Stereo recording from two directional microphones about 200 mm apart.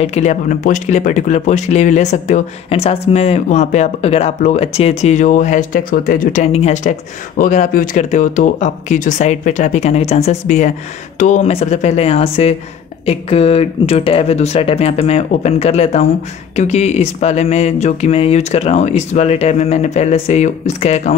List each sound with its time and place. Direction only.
0.0 s speech: 35° left (ahead or behind)